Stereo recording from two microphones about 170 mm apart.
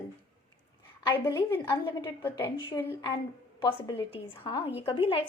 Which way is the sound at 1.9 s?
30° left (ahead or behind).